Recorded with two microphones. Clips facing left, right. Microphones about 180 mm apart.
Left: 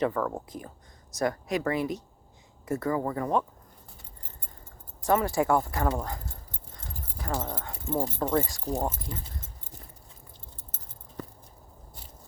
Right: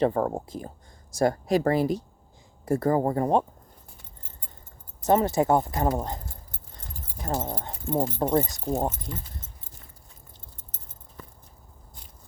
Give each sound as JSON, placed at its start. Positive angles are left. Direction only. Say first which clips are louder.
{"t": 0.0, "sound": "speech", "louder": "right 4 dB", "side_deg": -30}
{"t": 5.0, "sound": "speech", "louder": "right 3 dB", "side_deg": -25}
{"t": 7.3, "sound": "speech", "louder": "right 2 dB", "side_deg": -20}